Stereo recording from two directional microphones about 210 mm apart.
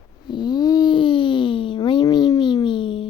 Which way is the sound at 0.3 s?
20° left (ahead or behind).